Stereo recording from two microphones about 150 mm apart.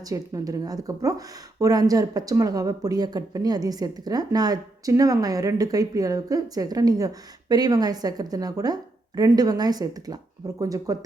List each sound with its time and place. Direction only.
0.0 s speech: 25° right (ahead or behind)